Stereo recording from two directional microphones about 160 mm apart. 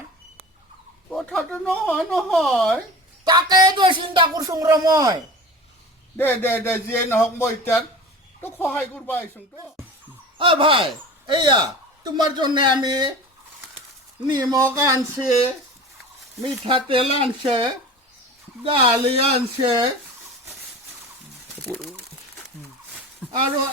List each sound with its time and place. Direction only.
1.1 s speech: centre (ahead or behind)
3.2 s speech: 25° right (ahead or behind)
6.1 s speech: 15° left (ahead or behind)
10.3 s speech: 35° right (ahead or behind)
14.3 s speech: 25° right (ahead or behind)
16.4 s speech: 30° right (ahead or behind)
23.2 s a sound: 5° left (ahead or behind)